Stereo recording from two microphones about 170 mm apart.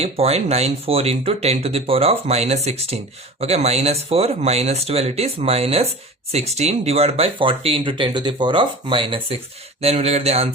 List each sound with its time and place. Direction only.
0.0 s speech: 35° right (ahead or behind)